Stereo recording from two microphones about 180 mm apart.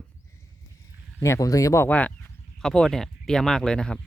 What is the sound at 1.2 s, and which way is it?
Speech, 20° left (ahead or behind).